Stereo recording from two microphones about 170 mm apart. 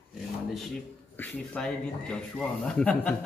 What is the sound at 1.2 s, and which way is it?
Speech, 5° left (ahead or behind).